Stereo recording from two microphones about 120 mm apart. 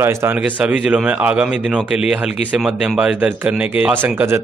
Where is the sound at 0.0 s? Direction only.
20° right (ahead or behind).